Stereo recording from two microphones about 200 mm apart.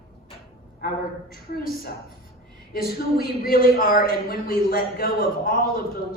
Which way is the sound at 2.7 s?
50° left (ahead or behind).